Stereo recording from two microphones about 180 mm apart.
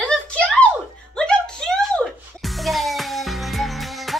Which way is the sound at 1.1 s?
5° left (ahead or behind).